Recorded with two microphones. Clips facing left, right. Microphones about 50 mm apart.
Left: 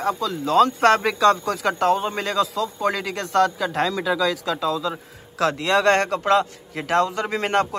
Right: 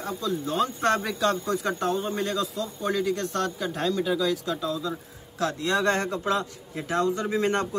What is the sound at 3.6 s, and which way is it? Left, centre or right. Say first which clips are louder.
Speech: left 4 dB; left.